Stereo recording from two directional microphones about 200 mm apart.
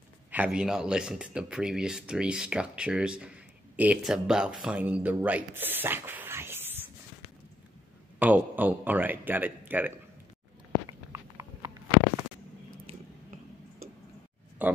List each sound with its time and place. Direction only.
0.3 s speech: 5° right (ahead or behind)
8.2 s a man's voice: 10° right (ahead or behind)
10.9 s horse: 15° right (ahead or behind)
14.6 s speech: 10° right (ahead or behind)